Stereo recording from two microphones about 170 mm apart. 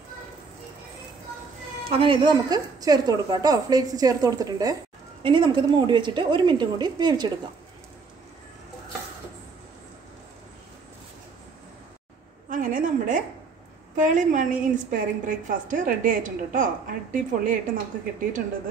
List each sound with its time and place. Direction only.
1.9 s a woman's voice: 30° right (ahead or behind)
12.4 s a sound: 50° right (ahead or behind)
13.9 s a woman's voice: 50° right (ahead or behind)